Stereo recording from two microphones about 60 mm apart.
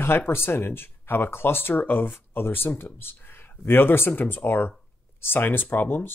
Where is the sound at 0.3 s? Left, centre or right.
Left.